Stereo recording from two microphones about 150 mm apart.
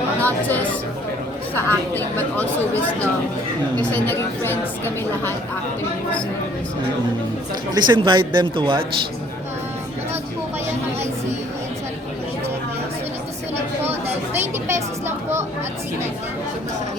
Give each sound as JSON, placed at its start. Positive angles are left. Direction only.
{"t": 0.2, "sound": "a woman's voice", "side_deg": 10}
{"t": 7.7, "sound": "speech", "side_deg": -30}
{"t": 14.3, "sound": "a woman's voice", "side_deg": -15}